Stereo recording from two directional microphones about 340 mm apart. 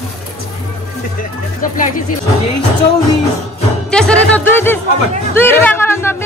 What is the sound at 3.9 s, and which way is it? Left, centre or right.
Music, centre.